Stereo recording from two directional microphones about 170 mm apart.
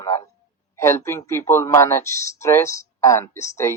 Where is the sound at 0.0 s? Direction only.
15° left (ahead or behind).